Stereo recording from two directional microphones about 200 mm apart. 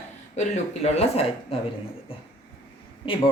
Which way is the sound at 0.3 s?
35° left (ahead or behind).